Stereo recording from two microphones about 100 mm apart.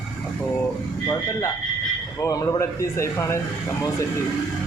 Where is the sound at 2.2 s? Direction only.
35° left (ahead or behind).